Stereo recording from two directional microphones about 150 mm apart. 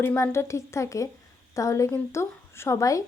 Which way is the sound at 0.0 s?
15° left (ahead or behind).